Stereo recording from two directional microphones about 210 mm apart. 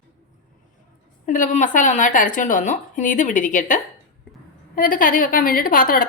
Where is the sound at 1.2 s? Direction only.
35° left (ahead or behind).